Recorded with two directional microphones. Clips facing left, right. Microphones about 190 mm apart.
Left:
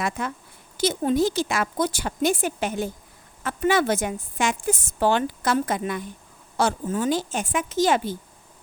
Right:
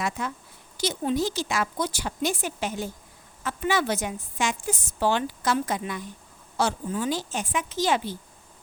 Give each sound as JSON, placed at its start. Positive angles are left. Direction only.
{"t": 0.0, "sound": "a woman's voice", "side_deg": 55}